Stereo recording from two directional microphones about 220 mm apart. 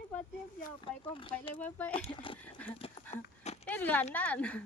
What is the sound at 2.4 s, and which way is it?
Horse, 5° left (ahead or behind).